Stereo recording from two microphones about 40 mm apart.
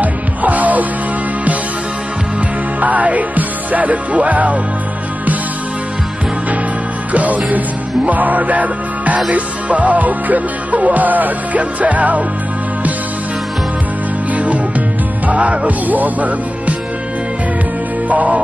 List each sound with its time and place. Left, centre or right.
0.0 s music: right
2.8 s music: right
7.1 s music: right
14.3 s music: right
18.0 s music: right